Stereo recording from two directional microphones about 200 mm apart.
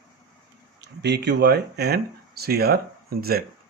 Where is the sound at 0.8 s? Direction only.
60° right (ahead or behind).